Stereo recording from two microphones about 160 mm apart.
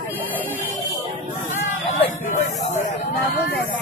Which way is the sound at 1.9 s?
45° left (ahead or behind).